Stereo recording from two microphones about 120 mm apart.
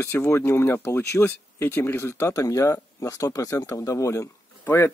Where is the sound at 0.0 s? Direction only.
20° left (ahead or behind).